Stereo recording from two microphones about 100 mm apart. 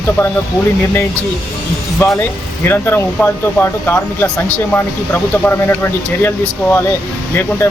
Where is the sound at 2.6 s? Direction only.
20° left (ahead or behind).